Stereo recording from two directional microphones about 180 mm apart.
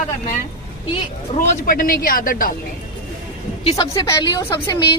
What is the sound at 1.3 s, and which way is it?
Speech, 50° left (ahead or behind).